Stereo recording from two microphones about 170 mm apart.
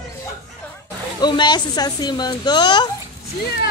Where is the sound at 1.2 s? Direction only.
25° left (ahead or behind).